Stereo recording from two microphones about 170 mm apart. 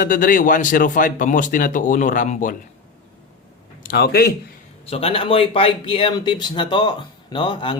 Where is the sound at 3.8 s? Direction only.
65° left (ahead or behind).